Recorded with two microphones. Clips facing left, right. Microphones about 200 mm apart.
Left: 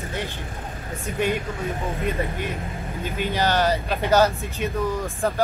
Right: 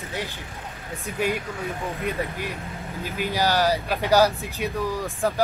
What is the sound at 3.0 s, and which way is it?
Speech, 10° right (ahead or behind).